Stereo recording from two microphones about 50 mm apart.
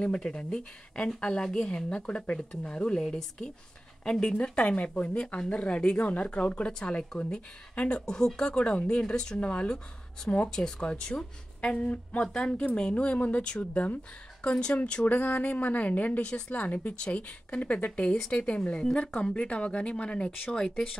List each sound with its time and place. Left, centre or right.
0.0 s a woman's voice: left
4.6 s speech: left
8.0 s speech: centre
15.0 s a woman's voice: left; by 21.0 s centre